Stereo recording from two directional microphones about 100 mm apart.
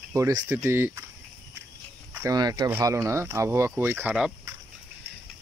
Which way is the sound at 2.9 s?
30° right (ahead or behind).